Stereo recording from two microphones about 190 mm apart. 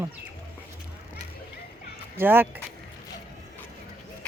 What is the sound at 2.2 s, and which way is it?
Speech, 10° right (ahead or behind).